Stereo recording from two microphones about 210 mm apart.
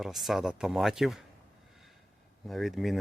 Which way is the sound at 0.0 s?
Centre (ahead or behind).